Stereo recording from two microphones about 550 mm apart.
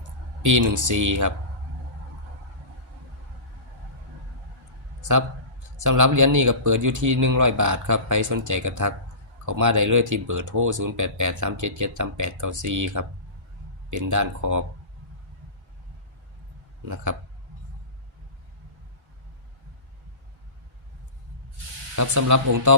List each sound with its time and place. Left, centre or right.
0.4 s speech: right
4.9 s a sound: right
5.7 s speech: right
16.9 s speech: right
21.9 s speech: right